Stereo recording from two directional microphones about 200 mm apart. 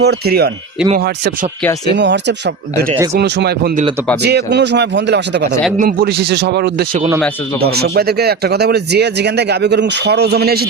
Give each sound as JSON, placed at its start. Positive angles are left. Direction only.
{"t": 0.0, "sound": "speech", "side_deg": -55}
{"t": 5.7, "sound": "speech", "side_deg": -45}